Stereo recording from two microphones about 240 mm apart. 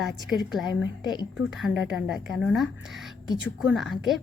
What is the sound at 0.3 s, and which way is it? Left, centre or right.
A woman's voice, centre.